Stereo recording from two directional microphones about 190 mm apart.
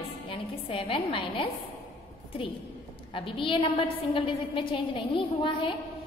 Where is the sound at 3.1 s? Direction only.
30° left (ahead or behind).